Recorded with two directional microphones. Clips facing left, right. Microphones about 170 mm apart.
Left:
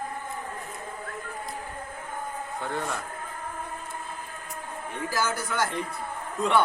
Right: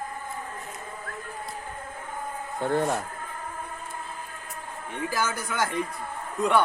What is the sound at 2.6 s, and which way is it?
Speech, 45° right (ahead or behind).